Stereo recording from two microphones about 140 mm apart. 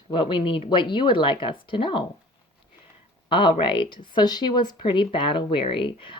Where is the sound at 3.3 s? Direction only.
35° left (ahead or behind).